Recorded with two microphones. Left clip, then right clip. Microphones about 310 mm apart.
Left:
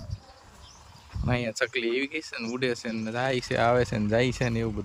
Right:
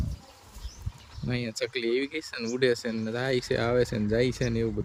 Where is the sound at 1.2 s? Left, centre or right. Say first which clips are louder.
Left 4 dB; centre.